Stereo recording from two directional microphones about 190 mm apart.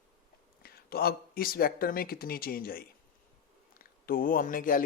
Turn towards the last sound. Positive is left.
turn(degrees=45)  # may be behind; listen again after turning